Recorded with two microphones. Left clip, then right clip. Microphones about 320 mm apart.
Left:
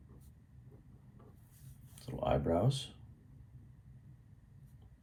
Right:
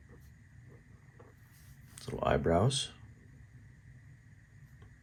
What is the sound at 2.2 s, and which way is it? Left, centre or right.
Speech, right.